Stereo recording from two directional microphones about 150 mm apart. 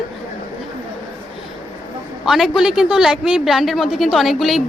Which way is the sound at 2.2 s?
Centre (ahead or behind).